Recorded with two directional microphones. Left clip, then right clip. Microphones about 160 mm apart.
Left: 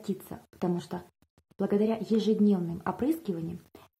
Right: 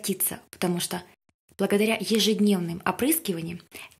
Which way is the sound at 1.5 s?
10° right (ahead or behind).